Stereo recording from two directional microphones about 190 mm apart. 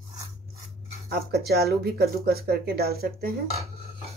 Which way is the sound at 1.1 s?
55° right (ahead or behind).